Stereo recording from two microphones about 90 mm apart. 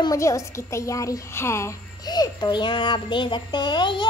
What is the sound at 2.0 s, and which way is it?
A child's voice, 50° left (ahead or behind).